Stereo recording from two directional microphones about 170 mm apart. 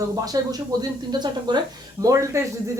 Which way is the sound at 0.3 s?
20° right (ahead or behind).